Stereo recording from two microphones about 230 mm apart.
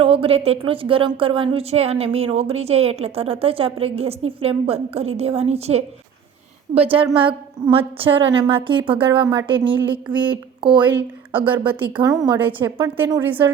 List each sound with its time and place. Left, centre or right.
0.0 s a woman's voice: right
7.2 s a woman's voice: right
11.4 s a woman's voice: centre